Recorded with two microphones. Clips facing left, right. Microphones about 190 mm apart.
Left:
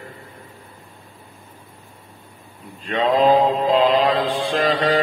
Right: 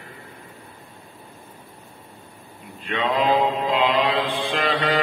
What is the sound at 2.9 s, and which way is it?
Mantra, 35° left (ahead or behind).